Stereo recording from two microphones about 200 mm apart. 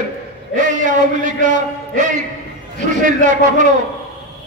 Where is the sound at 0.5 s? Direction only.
40° right (ahead or behind).